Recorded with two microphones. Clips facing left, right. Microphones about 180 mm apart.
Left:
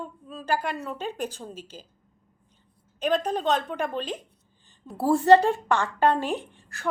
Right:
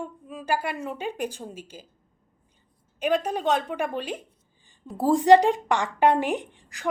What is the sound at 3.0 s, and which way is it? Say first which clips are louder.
A woman's voice: even; 10° right (ahead or behind).